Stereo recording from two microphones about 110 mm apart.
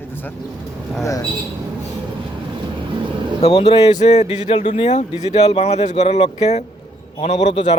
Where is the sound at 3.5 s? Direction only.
60° left (ahead or behind); by 7.8 s 85° left.